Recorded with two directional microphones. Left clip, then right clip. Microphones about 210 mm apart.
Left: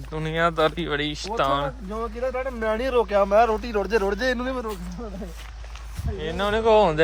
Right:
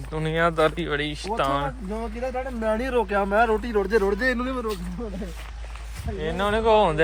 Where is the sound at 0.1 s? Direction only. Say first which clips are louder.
Even; 15° left (ahead or behind).